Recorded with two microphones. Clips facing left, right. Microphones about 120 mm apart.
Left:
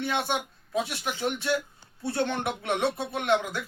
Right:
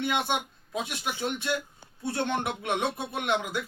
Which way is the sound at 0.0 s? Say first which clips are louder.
Even; 15° right (ahead or behind).